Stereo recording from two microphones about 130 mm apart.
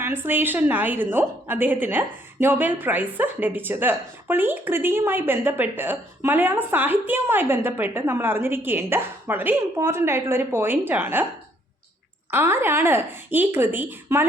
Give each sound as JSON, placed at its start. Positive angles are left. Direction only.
{"t": 0.0, "sound": "a woman's voice", "side_deg": -15}
{"t": 12.3, "sound": "a woman's voice", "side_deg": -15}